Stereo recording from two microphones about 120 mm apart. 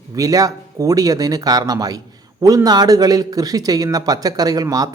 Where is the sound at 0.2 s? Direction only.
30° right (ahead or behind).